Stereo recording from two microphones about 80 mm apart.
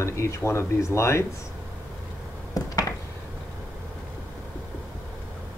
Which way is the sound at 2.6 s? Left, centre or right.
Left.